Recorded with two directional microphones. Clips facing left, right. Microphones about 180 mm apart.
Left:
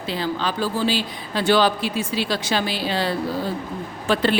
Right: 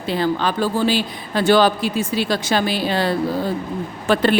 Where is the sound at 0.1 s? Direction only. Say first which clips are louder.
Right 5 dB; 55° right (ahead or behind).